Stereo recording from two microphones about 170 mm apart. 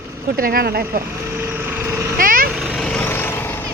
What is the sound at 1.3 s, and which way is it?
Vehicle, 15° right (ahead or behind).